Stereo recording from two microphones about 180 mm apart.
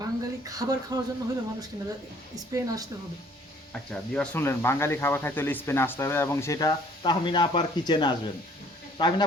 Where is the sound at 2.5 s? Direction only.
20° right (ahead or behind).